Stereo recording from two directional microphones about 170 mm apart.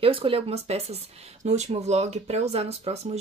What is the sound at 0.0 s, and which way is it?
Speech, 35° right (ahead or behind).